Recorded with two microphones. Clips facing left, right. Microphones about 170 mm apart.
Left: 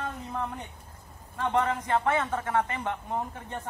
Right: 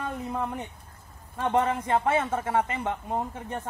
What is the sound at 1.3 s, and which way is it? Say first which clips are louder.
Speech: right 2 dB; 20° right (ahead or behind).